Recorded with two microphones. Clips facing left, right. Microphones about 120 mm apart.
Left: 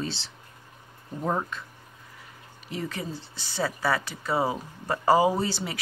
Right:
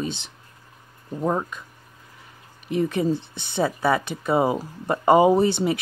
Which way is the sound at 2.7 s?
20° right (ahead or behind).